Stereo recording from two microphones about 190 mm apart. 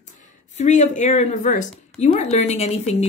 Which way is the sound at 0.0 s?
40° left (ahead or behind).